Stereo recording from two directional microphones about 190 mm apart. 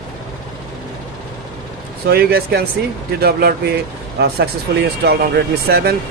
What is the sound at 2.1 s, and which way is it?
Speech, 55° right (ahead or behind).